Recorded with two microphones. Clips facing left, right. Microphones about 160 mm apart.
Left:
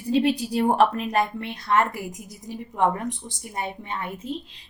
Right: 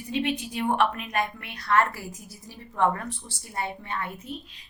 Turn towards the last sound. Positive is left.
turn(degrees=20)  # may be behind; listen again after turning